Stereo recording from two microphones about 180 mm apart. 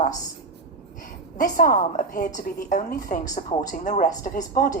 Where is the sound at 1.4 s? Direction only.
50° left (ahead or behind).